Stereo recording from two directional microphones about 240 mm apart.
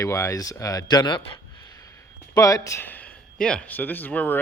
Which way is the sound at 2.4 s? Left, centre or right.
Centre.